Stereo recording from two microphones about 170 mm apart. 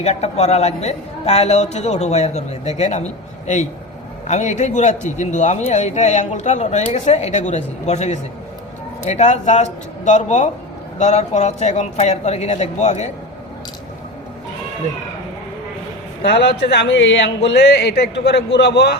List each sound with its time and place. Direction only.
0.0 s a woman's voice: 40° left (ahead or behind)
16.2 s speech: 75° left (ahead or behind)